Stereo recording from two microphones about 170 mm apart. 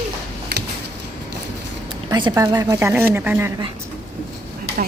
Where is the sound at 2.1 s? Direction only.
25° right (ahead or behind).